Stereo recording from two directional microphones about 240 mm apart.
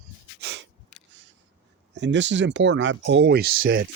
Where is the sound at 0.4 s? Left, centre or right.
Right.